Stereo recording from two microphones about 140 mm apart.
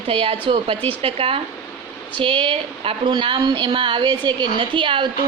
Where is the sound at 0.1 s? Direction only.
40° right (ahead or behind).